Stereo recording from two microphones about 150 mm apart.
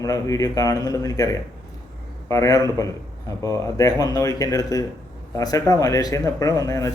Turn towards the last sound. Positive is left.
turn(degrees=20)  # may be behind; listen again after turning